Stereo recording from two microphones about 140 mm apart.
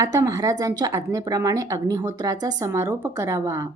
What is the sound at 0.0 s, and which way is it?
A woman's voice, 20° right (ahead or behind).